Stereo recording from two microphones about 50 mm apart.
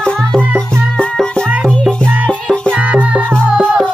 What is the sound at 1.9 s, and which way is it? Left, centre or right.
Music, left.